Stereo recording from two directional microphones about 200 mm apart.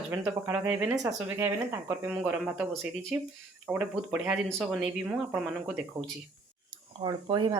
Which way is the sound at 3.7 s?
5° right (ahead or behind).